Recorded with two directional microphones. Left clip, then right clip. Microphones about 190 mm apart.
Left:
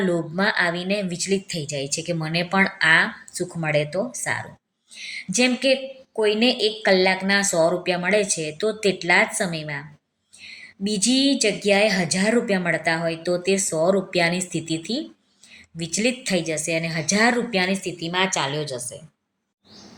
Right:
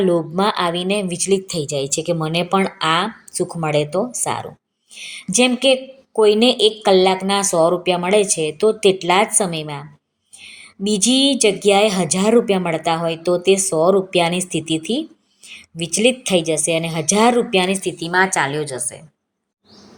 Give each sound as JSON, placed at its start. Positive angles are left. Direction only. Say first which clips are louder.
{"t": 0.0, "sound": "a woman's voice", "louder": "right 5 dB", "side_deg": -20}
{"t": 6.2, "sound": "a woman's voice", "louder": "right 6 dB", "side_deg": 10}
{"t": 6.5, "sound": "a woman's voice", "louder": "right 5 dB", "side_deg": -20}